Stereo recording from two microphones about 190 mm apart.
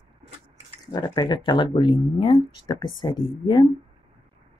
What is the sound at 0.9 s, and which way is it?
Speech, 20° left (ahead or behind).